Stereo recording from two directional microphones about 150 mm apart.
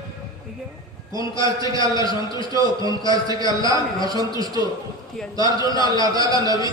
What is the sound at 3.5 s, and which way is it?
A man's voice, 25° right (ahead or behind).